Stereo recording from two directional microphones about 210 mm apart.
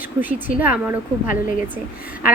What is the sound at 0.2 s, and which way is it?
Speech, 10° right (ahead or behind).